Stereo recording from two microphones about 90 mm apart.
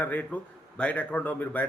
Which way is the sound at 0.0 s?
20° left (ahead or behind).